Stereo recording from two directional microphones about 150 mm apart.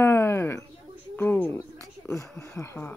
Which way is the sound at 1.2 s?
15° left (ahead or behind).